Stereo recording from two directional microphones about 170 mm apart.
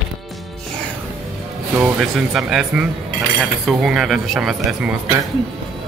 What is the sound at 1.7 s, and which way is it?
Speech, 5° right (ahead or behind).